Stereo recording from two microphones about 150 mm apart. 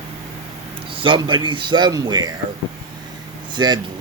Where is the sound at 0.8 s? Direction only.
35° right (ahead or behind).